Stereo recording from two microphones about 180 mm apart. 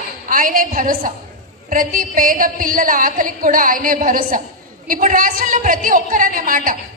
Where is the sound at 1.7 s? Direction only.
50° right (ahead or behind).